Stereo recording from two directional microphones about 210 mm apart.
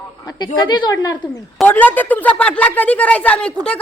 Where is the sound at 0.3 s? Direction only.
20° left (ahead or behind).